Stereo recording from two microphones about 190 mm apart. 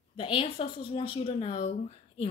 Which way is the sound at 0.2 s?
30° left (ahead or behind).